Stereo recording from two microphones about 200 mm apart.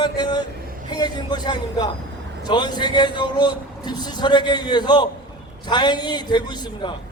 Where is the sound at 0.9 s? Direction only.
20° left (ahead or behind).